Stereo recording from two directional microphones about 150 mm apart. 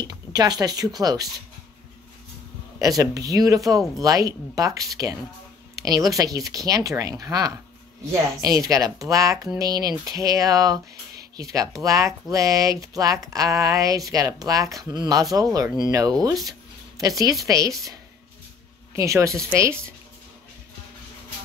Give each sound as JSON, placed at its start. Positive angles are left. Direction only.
{"t": 0.0, "sound": "speech", "side_deg": -25}
{"t": 2.8, "sound": "speech", "side_deg": -25}
{"t": 18.9, "sound": "speech", "side_deg": -20}